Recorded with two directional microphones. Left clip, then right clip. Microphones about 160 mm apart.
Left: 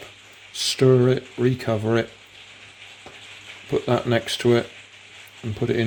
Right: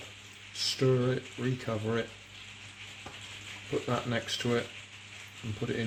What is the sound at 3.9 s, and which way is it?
Speech, 70° left (ahead or behind).